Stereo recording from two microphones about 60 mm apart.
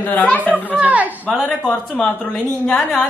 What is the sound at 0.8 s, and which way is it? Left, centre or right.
Speech, right.